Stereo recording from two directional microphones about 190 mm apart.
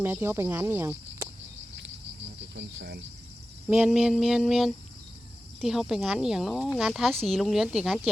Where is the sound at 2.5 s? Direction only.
65° right (ahead or behind).